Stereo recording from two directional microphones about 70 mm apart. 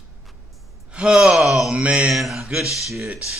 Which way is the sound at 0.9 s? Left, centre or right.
Centre.